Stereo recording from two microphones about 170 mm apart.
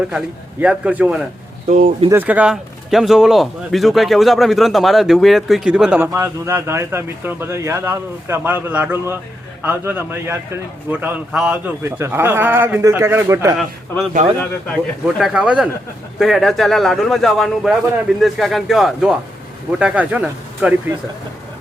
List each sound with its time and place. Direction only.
0.6 s a man's voice: 5° right (ahead or behind)
1.6 s speech: 55° right (ahead or behind)
2.0 s speech: 10° right (ahead or behind)
6.1 s a man's voice: 15° right (ahead or behind)
13.6 s a man's voice: centre (ahead or behind)